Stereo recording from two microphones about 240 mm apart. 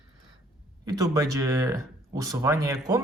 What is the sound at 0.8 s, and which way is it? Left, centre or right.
Speech, centre.